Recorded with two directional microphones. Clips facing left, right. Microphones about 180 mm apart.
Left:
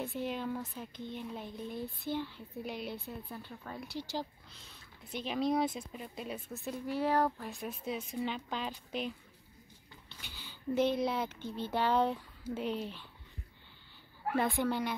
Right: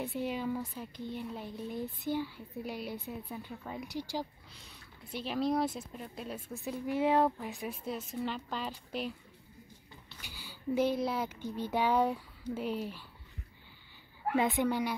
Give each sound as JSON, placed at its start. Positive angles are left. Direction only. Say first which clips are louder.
{"t": 0.0, "sound": "speech", "louder": "right 2 dB", "side_deg": -15}
{"t": 6.9, "sound": "speech", "louder": "right 3 dB", "side_deg": -20}
{"t": 7.5, "sound": "speech", "louder": "even", "side_deg": 0}
{"t": 10.2, "sound": "speech", "louder": "right 1 dB", "side_deg": -10}
{"t": 14.3, "sound": "speech", "louder": "right 2 dB", "side_deg": -15}